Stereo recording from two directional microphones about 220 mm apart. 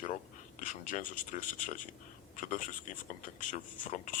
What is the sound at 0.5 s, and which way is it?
Speech, 35° left (ahead or behind).